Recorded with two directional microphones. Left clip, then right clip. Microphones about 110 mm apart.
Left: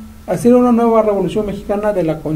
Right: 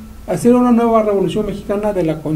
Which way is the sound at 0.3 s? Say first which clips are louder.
Left 1 dB; 20° right (ahead or behind).